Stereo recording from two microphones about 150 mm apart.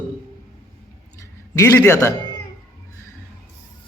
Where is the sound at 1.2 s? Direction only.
20° left (ahead or behind).